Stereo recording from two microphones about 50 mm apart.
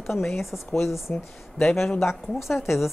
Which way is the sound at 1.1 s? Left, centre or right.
Left.